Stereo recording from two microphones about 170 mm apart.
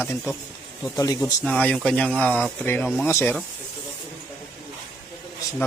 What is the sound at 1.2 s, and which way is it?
Speech, 10° left (ahead or behind).